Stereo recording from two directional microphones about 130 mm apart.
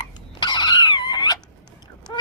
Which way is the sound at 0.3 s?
35° left (ahead or behind).